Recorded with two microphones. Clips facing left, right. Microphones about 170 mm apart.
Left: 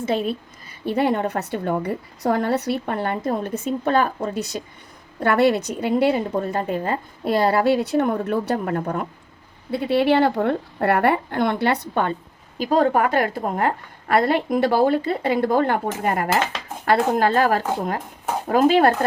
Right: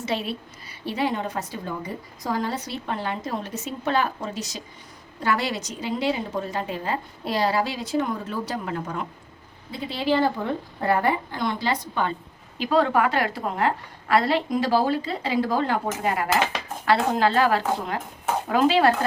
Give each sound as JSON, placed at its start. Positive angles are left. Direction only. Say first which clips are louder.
{"t": 0.0, "sound": "a woman's voice", "louder": "left 5 dB", "side_deg": 50}
{"t": 9.7, "sound": "a woman's voice", "louder": "left 6 dB", "side_deg": 65}
{"t": 12.5, "sound": "a woman's voice", "louder": "left 3 dB", "side_deg": 45}